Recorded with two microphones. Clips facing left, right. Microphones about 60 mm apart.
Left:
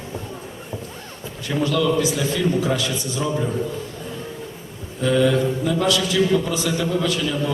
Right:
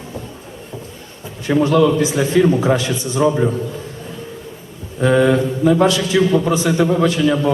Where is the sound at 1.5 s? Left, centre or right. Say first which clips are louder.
Right 7 dB; right.